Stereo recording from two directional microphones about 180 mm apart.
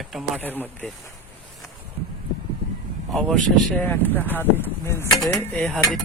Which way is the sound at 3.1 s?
Centre (ahead or behind).